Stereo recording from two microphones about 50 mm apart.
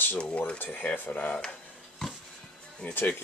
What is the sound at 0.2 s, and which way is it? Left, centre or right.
Speech, left.